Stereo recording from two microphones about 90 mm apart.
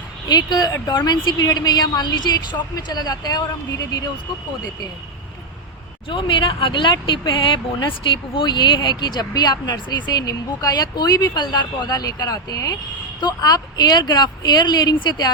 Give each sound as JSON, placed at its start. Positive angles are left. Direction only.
{"t": 0.3, "sound": "speech", "side_deg": 50}
{"t": 6.1, "sound": "speech", "side_deg": 70}